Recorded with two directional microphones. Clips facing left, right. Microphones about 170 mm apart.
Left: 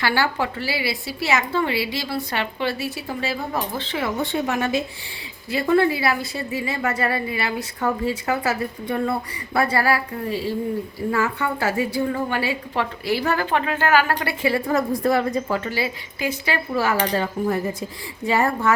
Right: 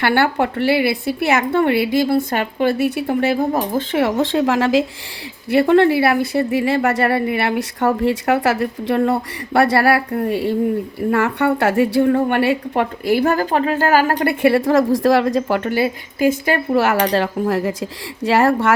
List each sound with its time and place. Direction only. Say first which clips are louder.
0.0 s a woman's voice: right 6 dB; 55° right (ahead or behind)
3.9 s speech: right 7 dB; 80° right
5.5 s speech: right 6 dB; 70° right (ahead or behind)
10.1 s a woman's voice: right 7 dB; 55° right (ahead or behind); by 14.3 s 40° right (ahead or behind)
14.4 s speech: right 7 dB; 80° right; by 16.6 s 50° right (ahead or behind)
16.7 s speech: right 5 dB; 70° right (ahead or behind)